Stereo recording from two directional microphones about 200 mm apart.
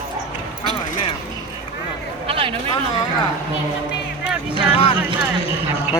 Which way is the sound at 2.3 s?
25° right (ahead or behind).